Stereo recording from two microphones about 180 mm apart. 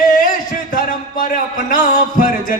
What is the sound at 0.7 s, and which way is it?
A man's voice, 50° left (ahead or behind).